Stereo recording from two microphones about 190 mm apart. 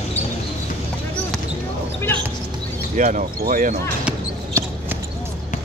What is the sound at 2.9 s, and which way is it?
Speech, 45° right (ahead or behind).